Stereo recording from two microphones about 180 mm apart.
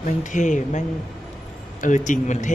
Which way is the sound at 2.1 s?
40° left (ahead or behind).